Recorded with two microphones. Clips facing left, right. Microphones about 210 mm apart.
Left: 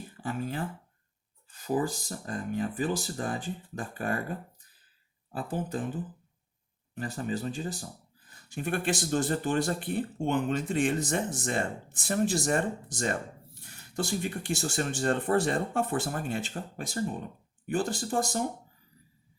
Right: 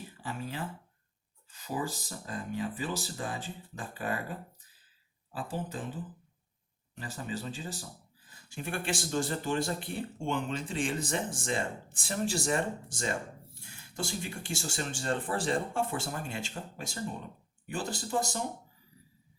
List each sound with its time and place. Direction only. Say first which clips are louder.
0.2 s speech: left 5 dB; 50° left (ahead or behind)
5.3 s speech: left 4 dB; 55° left (ahead or behind)